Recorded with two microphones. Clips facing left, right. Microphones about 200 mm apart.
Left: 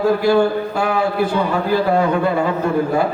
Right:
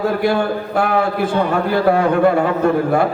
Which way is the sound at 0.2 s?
55° right (ahead or behind).